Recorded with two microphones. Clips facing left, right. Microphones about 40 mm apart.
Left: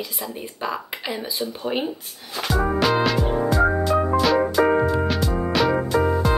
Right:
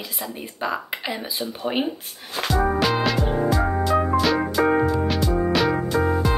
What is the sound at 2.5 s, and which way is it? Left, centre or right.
Music, centre.